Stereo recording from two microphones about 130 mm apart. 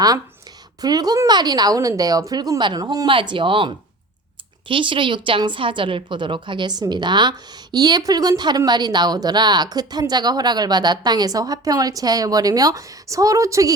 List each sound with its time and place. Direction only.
0.8 s a woman's voice: 30° right (ahead or behind)
3.1 s a woman's voice: 40° right (ahead or behind)
4.7 s a woman's voice: 40° right (ahead or behind); by 13.7 s 25° right (ahead or behind)